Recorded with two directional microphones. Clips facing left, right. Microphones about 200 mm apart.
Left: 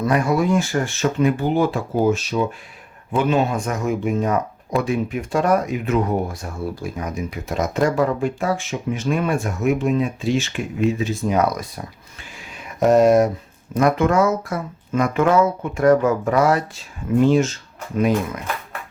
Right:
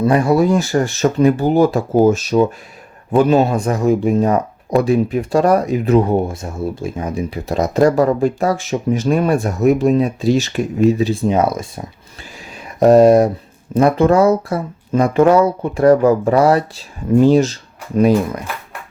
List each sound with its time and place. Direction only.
0.0 s speech: 30° right (ahead or behind)